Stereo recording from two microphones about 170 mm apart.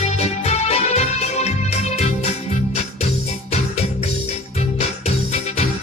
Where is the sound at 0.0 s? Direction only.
40° left (ahead or behind).